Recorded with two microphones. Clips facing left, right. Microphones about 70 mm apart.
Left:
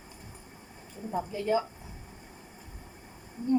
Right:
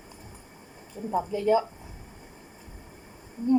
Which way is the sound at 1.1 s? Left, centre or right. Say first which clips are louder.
Right 5 dB; right.